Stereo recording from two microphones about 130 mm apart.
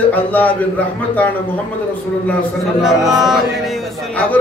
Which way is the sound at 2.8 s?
Centre (ahead or behind).